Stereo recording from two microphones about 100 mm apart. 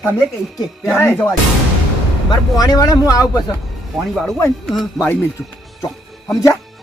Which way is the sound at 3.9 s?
Centre (ahead or behind).